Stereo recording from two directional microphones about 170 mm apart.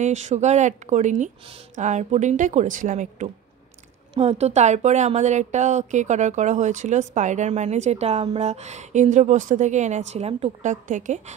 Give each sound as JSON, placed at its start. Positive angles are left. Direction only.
{"t": 0.0, "sound": "speech", "side_deg": -45}